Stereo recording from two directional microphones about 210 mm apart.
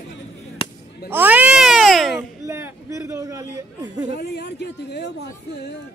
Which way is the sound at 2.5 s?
15° right (ahead or behind).